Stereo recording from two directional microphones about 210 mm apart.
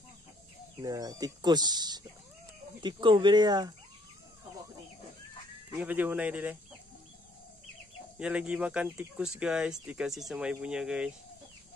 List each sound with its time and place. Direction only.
0.7 s speech: 15° right (ahead or behind)
5.8 s speech: 10° right (ahead or behind)
8.2 s speech: 5° right (ahead or behind)